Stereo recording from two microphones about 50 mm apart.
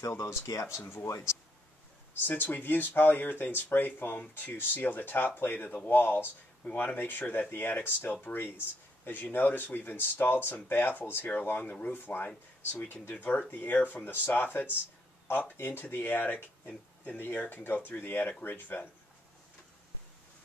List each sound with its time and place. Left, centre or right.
0.2 s speech: left
2.2 s speech: left